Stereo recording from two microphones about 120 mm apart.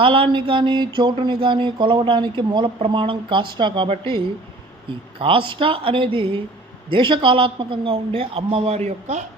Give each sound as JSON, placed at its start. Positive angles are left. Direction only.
{"t": 0.0, "sound": "speech", "side_deg": -45}
{"t": 5.2, "sound": "speech", "side_deg": -45}